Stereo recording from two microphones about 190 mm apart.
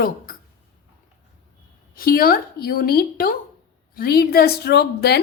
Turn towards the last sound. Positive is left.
turn(degrees=60)  # may be behind; listen again after turning